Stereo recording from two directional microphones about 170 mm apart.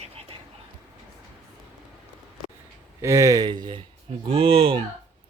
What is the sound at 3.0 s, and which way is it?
A man's voice, 20° right (ahead or behind).